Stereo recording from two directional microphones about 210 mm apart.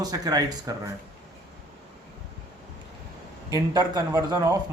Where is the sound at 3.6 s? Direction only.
15° right (ahead or behind).